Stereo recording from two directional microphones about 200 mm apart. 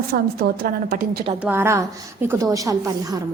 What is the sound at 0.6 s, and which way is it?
Speech, 50° right (ahead or behind).